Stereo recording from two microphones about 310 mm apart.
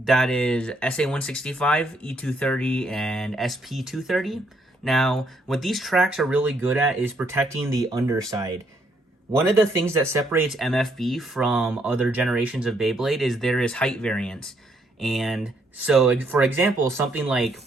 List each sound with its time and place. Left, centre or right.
0.0 s speech: centre
9.8 s speech: centre